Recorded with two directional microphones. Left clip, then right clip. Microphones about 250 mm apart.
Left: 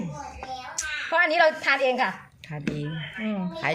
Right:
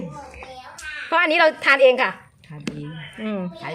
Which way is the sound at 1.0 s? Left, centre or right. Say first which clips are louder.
Right 4 dB; right.